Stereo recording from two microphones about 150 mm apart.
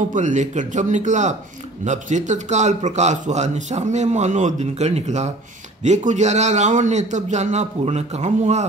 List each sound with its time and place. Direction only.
0.1 s a man's voice: 55° right (ahead or behind)